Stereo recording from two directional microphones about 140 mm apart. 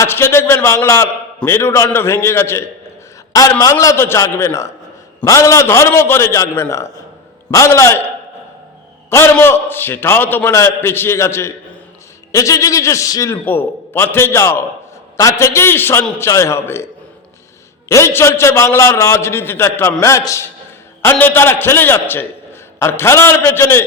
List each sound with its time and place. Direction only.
0.0 s a man's voice: 15° left (ahead or behind)
9.0 s a man's voice: 15° left (ahead or behind)